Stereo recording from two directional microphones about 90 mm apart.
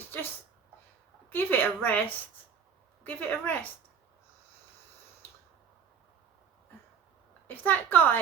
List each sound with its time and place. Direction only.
1.3 s a woman's voice: 20° left (ahead or behind)
7.4 s a woman's voice: 20° left (ahead or behind)